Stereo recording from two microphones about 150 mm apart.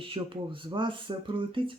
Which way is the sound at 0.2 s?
35° right (ahead or behind).